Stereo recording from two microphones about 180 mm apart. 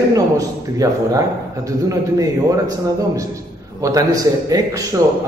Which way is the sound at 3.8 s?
20° right (ahead or behind).